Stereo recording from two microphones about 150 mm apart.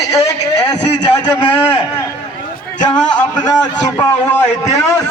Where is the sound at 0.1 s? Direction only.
20° left (ahead or behind).